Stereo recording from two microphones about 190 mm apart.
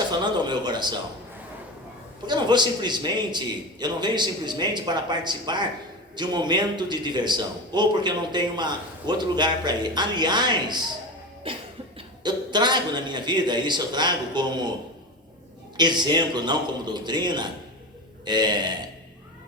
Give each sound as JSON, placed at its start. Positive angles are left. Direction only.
{"t": 0.1, "sound": "a sound", "side_deg": -20}
{"t": 2.2, "sound": "a man's voice", "side_deg": -20}
{"t": 11.5, "sound": "cough", "side_deg": -30}
{"t": 11.9, "sound": "a man's voice", "side_deg": -25}
{"t": 15.8, "sound": "a man's voice", "side_deg": -25}